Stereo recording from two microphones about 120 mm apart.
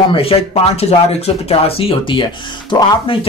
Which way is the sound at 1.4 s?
55° left (ahead or behind).